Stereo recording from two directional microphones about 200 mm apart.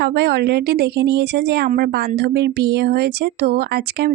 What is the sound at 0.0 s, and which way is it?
Speech, 60° right (ahead or behind).